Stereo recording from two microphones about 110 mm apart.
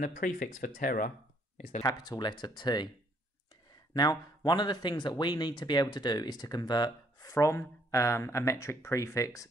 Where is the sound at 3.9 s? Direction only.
40° left (ahead or behind).